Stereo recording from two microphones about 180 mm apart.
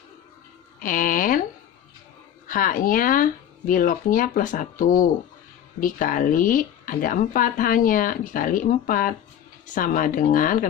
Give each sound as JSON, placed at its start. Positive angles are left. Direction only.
{"t": 0.8, "sound": "speech", "side_deg": 50}
{"t": 2.5, "sound": "speech", "side_deg": 50}